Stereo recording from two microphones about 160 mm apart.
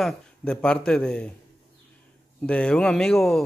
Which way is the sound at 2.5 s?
5° left (ahead or behind).